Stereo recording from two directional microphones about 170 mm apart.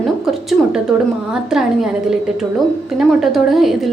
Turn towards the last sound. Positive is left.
turn(degrees=0)  # may be behind; listen again after turning